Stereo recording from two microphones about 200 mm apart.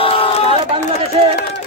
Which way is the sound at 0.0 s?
30° left (ahead or behind).